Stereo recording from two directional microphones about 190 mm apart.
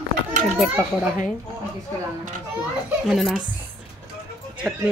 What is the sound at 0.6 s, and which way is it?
Speech, 5° right (ahead or behind).